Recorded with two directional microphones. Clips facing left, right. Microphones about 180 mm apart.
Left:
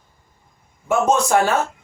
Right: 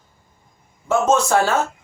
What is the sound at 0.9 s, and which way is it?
Speech, 15° left (ahead or behind).